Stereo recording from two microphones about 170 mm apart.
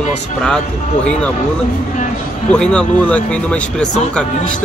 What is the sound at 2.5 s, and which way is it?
Speech, 5° left (ahead or behind).